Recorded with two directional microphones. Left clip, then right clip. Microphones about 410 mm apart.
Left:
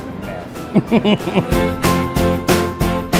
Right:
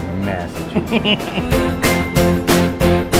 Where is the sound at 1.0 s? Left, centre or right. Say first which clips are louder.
Left 1 dB; left.